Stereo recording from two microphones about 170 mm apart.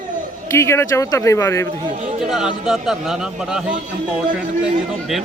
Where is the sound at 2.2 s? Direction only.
5° right (ahead or behind).